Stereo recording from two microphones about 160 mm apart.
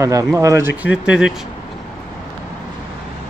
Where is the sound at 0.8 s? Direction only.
5° right (ahead or behind).